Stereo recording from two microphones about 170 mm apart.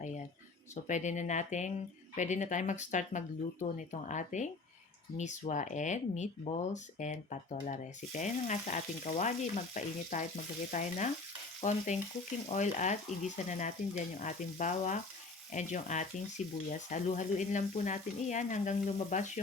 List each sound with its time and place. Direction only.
0.9 s speech: 45° left (ahead or behind)